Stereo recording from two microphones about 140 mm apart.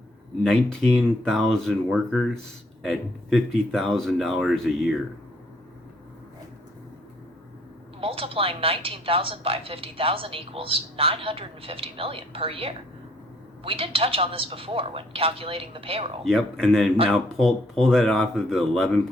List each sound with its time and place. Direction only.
0.4 s speech: 5° left (ahead or behind)
8.0 s a woman's voice: 40° right (ahead or behind)
16.2 s speech: 5° left (ahead or behind)